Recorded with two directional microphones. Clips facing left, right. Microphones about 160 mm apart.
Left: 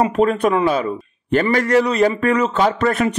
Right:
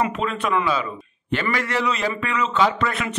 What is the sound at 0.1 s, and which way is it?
A man's voice, 45° left (ahead or behind).